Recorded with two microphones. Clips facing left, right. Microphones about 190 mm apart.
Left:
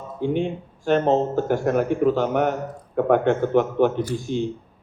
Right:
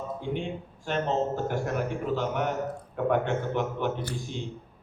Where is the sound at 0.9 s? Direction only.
60° left (ahead or behind).